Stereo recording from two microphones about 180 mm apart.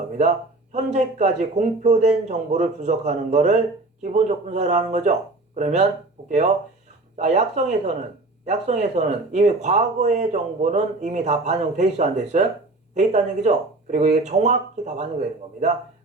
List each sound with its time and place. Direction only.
0.7 s speech: 40° right (ahead or behind)
7.2 s speech: 40° right (ahead or behind)